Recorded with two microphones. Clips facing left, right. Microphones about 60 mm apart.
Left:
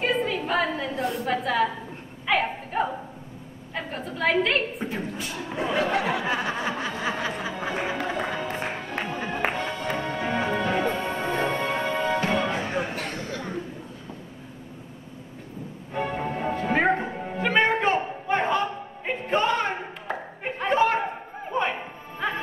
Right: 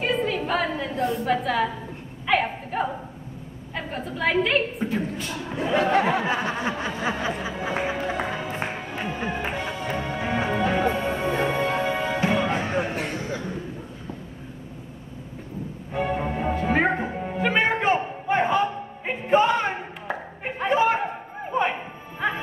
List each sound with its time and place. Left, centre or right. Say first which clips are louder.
0.0 s a sound: right 1 dB; centre
1.2 s a woman's voice: left 1 dB; centre
2.2 s a sound: right 2 dB; centre
3.7 s a woman's voice: right 1 dB; centre
5.8 s speech: right 5 dB; right
7.0 s music: right 2 dB; centre
12.4 s music: right 2 dB; right
12.7 s a sound: right 3 dB; centre
15.9 s music: right 2 dB; centre